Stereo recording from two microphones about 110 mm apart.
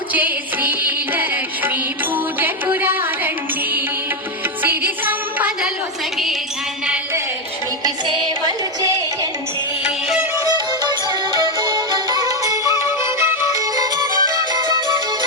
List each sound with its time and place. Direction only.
0.1 s music: 15° right (ahead or behind)
4.6 s music: 15° right (ahead or behind)
7.9 s music: 40° right (ahead or behind)
9.8 s music: 10° right (ahead or behind)
11.3 s music: 35° right (ahead or behind)